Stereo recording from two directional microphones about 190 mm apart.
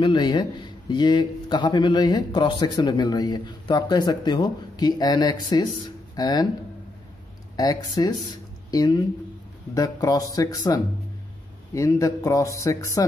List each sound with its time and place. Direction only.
0.0 s a man's voice: 25° left (ahead or behind)
7.5 s a man's voice: 20° left (ahead or behind)
8.3 s a sound: 20° left (ahead or behind)
9.8 s a man's voice: 20° left (ahead or behind)